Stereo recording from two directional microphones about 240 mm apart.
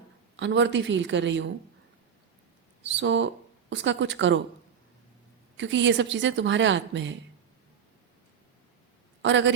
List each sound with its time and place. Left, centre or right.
0.3 s a woman's voice: right
2.8 s a woman's voice: right
5.5 s a woman's voice: right
9.2 s a woman's voice: right